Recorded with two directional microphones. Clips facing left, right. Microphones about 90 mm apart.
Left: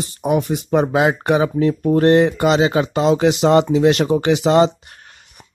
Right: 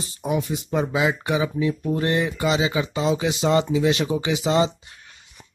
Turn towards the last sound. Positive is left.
turn(degrees=55)  # may be behind; listen again after turning